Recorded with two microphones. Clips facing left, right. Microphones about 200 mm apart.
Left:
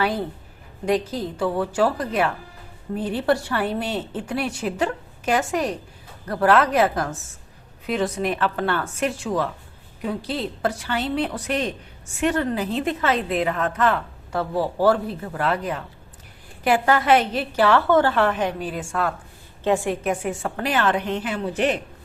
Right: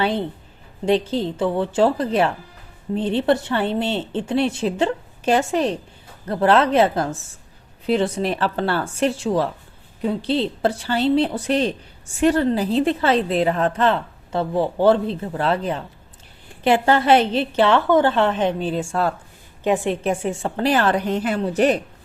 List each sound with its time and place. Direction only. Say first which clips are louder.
0.0 s a woman's voice: right 2 dB; 25° right (ahead or behind)